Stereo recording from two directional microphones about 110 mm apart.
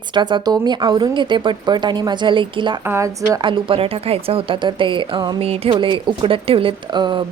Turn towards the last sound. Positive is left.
turn(degrees=-45)  # may be behind; listen again after turning